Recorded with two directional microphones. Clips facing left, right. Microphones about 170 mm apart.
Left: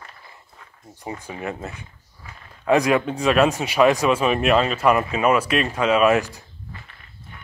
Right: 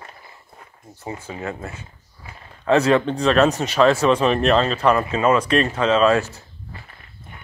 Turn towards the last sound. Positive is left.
turn(degrees=15)  # may be behind; listen again after turning